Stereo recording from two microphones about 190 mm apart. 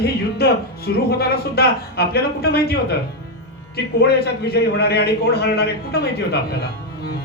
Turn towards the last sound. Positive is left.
turn(degrees=55)  # may be behind; listen again after turning